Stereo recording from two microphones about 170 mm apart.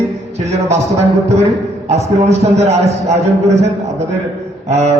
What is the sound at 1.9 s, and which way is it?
A man's voice, 40° right (ahead or behind).